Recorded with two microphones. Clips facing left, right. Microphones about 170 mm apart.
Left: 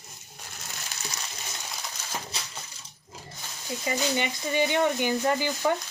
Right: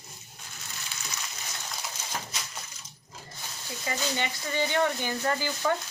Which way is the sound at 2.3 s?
30° left (ahead or behind).